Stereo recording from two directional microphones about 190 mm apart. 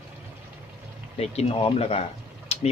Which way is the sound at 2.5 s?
35° left (ahead or behind).